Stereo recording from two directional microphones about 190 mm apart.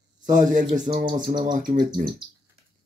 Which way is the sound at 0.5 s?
45° right (ahead or behind).